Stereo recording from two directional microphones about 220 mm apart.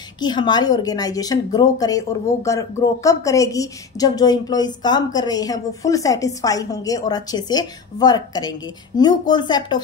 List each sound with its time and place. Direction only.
0.2 s a woman's voice: 20° left (ahead or behind)